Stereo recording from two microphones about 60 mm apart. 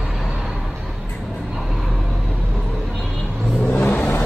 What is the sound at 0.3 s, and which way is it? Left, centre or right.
Vehicle, centre.